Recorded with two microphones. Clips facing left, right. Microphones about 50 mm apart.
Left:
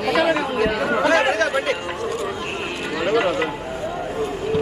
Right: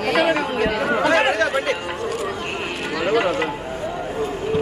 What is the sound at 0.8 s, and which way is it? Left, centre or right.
Chatter, centre.